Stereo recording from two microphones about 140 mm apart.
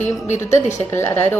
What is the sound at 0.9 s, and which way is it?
Speech, 15° left (ahead or behind).